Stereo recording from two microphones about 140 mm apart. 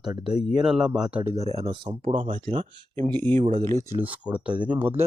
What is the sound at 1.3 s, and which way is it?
Speech, 50° right (ahead or behind).